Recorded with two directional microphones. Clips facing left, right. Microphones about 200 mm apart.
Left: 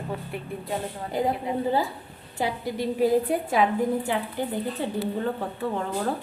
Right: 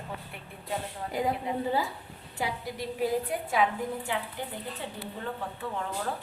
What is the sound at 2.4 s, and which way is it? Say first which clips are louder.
A woman's voice: left 6 dB; 30° left (ahead or behind).